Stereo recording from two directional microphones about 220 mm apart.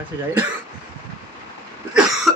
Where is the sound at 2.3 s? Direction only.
Centre (ahead or behind).